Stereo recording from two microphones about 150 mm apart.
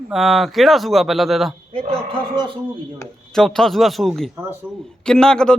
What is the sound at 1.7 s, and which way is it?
Speech, 40° right (ahead or behind).